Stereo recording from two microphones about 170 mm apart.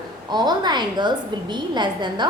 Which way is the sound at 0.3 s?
25° right (ahead or behind).